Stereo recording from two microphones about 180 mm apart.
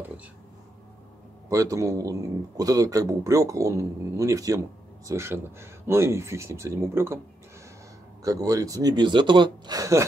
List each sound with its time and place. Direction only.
1.5 s speech: 15° right (ahead or behind)
8.2 s speech: 20° right (ahead or behind)